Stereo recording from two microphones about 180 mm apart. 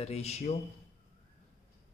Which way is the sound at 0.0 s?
35° left (ahead or behind).